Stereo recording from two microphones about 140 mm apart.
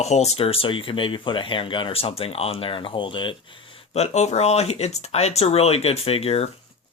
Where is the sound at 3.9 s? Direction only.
50° left (ahead or behind).